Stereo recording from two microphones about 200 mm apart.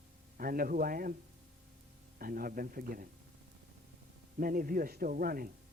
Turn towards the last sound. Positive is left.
turn(degrees=-45)  # may be behind; listen again after turning